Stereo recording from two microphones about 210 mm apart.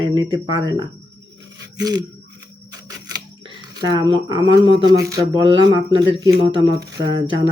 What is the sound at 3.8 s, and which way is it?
Speech, 20° right (ahead or behind).